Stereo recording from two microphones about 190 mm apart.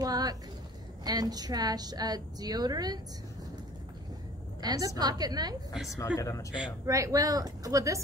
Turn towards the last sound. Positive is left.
turn(degrees=-15)  # may be behind; listen again after turning